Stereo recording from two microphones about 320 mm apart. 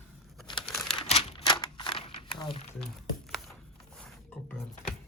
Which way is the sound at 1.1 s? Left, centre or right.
Centre.